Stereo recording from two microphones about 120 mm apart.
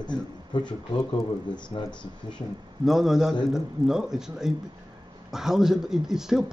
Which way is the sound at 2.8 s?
Centre (ahead or behind).